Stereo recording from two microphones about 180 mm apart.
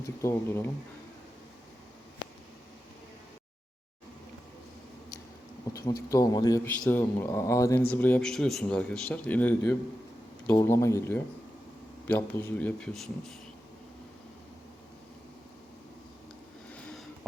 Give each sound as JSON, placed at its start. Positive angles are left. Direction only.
{"t": 0.0, "sound": "speech", "side_deg": 15}
{"t": 5.7, "sound": "speech", "side_deg": 20}